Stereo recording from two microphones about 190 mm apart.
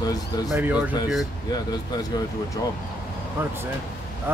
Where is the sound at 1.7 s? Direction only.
20° left (ahead or behind).